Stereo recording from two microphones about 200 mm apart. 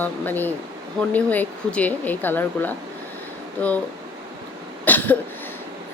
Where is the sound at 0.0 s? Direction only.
10° left (ahead or behind).